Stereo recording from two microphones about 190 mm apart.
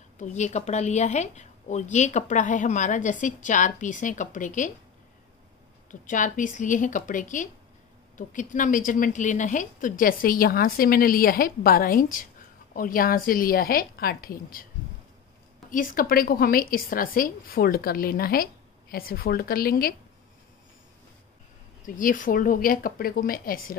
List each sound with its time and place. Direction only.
0.2 s a woman's voice: 40° left (ahead or behind)
5.9 s a woman's voice: 45° left (ahead or behind)
15.7 s a woman's voice: 45° left (ahead or behind)
21.8 s a woman's voice: 45° left (ahead or behind)